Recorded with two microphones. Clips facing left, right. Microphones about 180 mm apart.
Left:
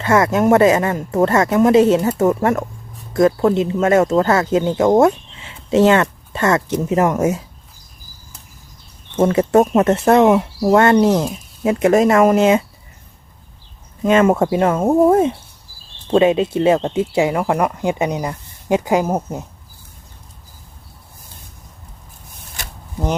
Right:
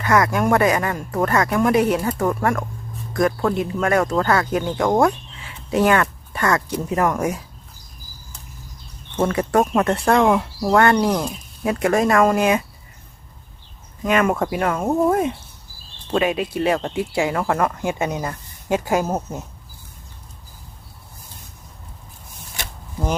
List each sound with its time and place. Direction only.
0.0 s speech: 25° left (ahead or behind)
9.2 s speech: 25° left (ahead or behind)
14.0 s speech: 25° left (ahead or behind)